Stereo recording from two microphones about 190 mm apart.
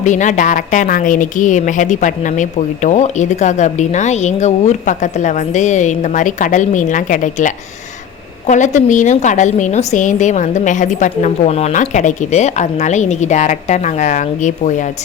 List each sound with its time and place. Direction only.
0.0 s a woman's voice: 40° left (ahead or behind)